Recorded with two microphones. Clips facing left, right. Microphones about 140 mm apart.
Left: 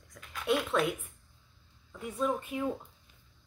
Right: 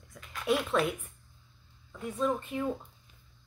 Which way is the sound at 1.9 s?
5° left (ahead or behind).